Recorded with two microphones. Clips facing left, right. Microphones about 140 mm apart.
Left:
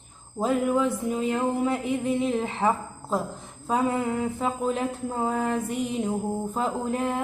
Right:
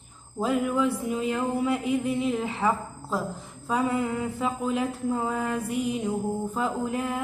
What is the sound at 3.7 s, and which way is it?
Music, 25° left (ahead or behind).